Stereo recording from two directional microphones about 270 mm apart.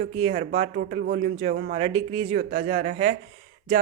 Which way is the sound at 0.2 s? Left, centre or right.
Right.